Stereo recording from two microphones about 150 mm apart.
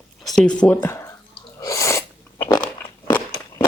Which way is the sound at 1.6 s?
20° left (ahead or behind).